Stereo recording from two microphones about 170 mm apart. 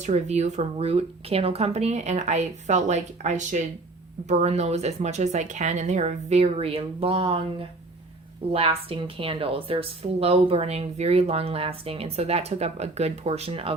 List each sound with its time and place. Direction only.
0.0 s a woman's voice: 40° right (ahead or behind)